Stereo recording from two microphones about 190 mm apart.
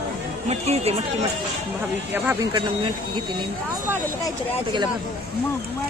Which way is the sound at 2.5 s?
25° right (ahead or behind).